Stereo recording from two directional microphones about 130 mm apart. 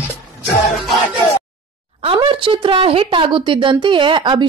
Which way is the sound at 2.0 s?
40° right (ahead or behind).